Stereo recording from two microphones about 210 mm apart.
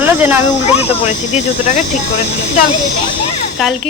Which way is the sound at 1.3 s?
35° left (ahead or behind).